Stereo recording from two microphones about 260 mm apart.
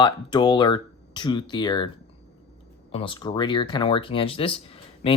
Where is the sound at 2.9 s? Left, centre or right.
Left.